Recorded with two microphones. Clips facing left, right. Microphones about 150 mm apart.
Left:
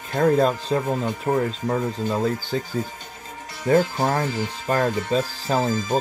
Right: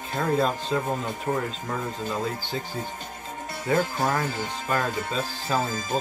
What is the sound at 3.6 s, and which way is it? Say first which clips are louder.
Speech: left 5 dB; 30° left (ahead or behind).